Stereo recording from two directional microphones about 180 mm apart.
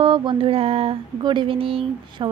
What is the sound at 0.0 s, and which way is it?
Speech, 30° right (ahead or behind).